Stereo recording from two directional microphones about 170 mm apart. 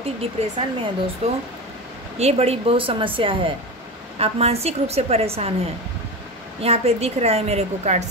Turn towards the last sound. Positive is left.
turn(degrees=-40)  # may be behind; listen again after turning